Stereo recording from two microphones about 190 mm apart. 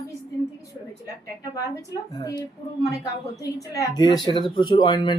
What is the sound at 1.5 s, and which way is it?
A woman's voice, 20° left (ahead or behind).